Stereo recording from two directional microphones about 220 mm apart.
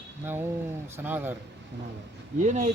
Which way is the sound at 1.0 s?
10° right (ahead or behind).